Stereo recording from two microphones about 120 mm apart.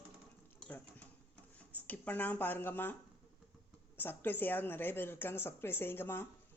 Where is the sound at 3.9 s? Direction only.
15° left (ahead or behind).